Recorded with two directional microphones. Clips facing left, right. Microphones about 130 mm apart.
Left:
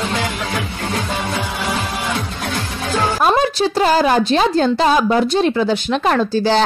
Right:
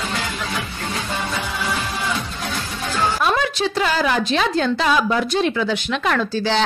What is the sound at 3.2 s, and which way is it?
A woman's voice, 40° left (ahead or behind).